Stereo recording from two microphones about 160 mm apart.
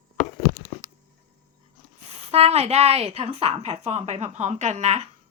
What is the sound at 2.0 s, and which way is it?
A woman's voice, 40° right (ahead or behind).